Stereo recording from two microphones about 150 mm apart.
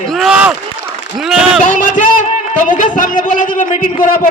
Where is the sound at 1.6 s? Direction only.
60° left (ahead or behind).